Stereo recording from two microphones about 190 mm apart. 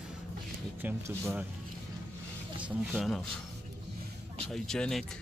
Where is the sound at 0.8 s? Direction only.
10° right (ahead or behind).